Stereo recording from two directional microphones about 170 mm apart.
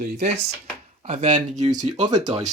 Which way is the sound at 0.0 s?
40° right (ahead or behind).